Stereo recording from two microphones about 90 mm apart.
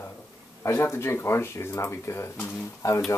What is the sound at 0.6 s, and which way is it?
Speech, 30° left (ahead or behind).